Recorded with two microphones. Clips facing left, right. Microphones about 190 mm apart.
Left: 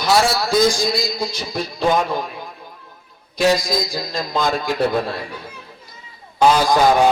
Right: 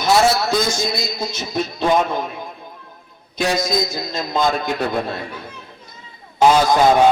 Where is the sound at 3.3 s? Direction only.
25° right (ahead or behind).